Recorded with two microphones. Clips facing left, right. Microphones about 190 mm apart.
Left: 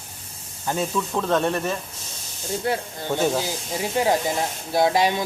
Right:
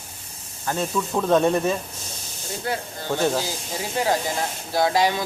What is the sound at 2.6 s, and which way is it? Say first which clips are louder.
Speech: left 1 dB; 20° left (ahead or behind).